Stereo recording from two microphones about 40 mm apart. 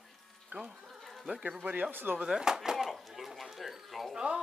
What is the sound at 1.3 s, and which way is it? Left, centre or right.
Speech, right.